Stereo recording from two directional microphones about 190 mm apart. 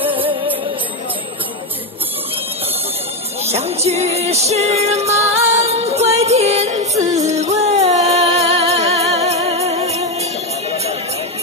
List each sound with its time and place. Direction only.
3.4 s music: 35° right (ahead or behind)